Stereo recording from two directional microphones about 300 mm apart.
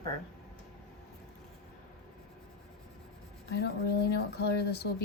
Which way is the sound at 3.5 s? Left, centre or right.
Left.